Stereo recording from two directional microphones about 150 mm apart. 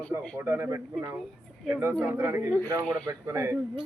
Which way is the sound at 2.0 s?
15° right (ahead or behind).